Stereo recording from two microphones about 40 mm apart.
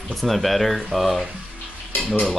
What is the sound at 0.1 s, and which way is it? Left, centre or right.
Speech, centre.